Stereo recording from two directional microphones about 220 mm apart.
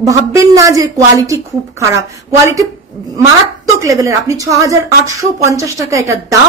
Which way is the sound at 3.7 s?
15° right (ahead or behind).